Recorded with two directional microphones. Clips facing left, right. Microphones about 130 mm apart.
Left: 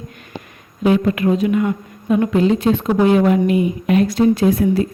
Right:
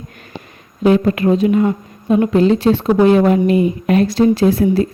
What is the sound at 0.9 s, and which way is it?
A woman's voice, 35° right (ahead or behind).